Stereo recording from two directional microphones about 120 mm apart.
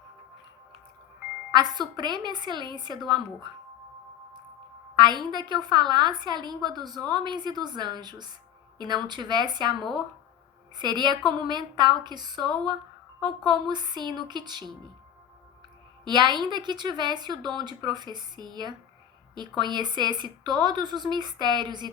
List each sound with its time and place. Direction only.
1.5 s a woman's voice: 35° right (ahead or behind)
4.9 s a woman's voice: 35° right (ahead or behind)
10.8 s a woman's voice: 40° right (ahead or behind)
16.0 s a woman's voice: 40° right (ahead or behind)